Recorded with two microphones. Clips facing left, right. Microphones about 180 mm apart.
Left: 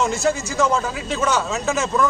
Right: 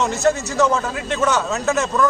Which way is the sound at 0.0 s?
Centre (ahead or behind).